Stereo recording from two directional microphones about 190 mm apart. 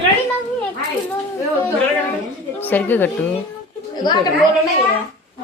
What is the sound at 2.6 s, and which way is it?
Speech, 10° left (ahead or behind).